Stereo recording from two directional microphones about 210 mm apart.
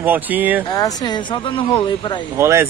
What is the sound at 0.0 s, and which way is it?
Speech, 10° right (ahead or behind).